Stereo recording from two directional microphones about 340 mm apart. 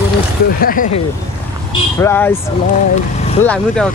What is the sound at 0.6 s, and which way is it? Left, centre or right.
Speech, left.